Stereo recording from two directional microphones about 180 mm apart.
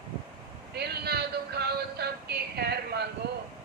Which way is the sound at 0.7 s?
65° right (ahead or behind).